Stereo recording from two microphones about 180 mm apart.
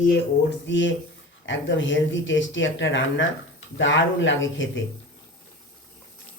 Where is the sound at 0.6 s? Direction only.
90° left.